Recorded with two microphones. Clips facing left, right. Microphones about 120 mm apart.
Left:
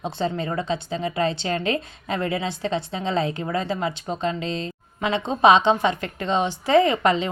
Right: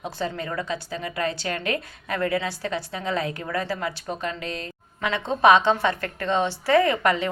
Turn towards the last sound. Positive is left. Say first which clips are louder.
# left 2 dB
turn(degrees=20)  # may be behind; listen again after turning